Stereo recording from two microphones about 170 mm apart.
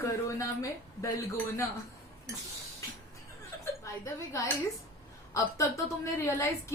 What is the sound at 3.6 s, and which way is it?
A woman's voice, 15° left (ahead or behind).